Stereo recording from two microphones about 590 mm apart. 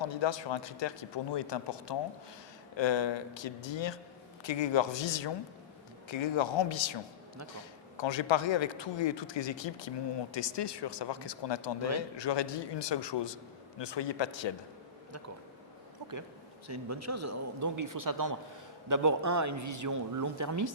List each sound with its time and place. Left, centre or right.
0.0 s a man's voice: left
16.6 s a man's voice: right